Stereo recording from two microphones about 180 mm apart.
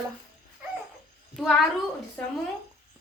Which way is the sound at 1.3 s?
Centre (ahead or behind).